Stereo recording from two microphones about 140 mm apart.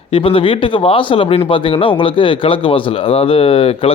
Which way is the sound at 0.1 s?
40° left (ahead or behind).